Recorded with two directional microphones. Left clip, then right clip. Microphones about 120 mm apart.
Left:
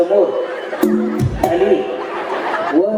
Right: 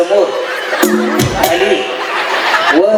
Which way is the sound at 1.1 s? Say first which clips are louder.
Right 5 dB; 15° right (ahead or behind).